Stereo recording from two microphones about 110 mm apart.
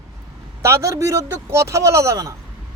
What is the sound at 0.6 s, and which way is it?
Speech, 25° right (ahead or behind).